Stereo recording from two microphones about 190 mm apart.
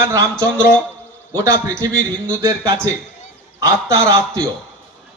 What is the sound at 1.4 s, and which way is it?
Speech, 20° right (ahead or behind).